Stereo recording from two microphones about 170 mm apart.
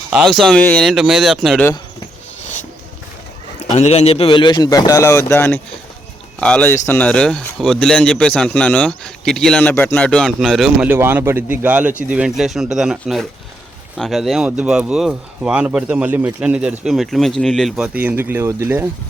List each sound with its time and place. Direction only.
0.1 s speech: centre (ahead or behind)
3.8 s speech: 40° left (ahead or behind); by 10.8 s centre (ahead or behind)
10.8 s speech: 10° right (ahead or behind)